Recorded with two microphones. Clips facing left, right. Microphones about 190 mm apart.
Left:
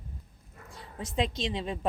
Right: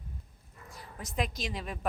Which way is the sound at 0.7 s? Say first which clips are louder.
Left 4 dB; 25° left (ahead or behind).